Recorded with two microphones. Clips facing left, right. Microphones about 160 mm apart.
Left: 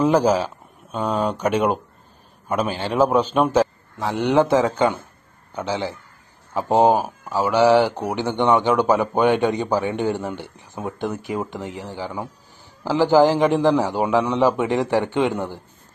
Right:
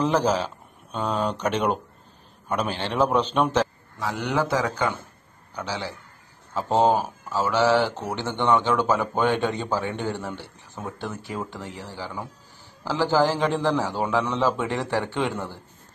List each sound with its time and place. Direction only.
0.0 s a man's voice: 10° left (ahead or behind)
4.0 s a man's voice: 25° left (ahead or behind)